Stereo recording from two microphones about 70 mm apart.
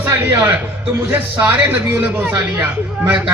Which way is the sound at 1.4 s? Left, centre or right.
Right.